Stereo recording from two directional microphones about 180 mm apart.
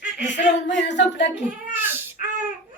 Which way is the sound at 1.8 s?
10° right (ahead or behind).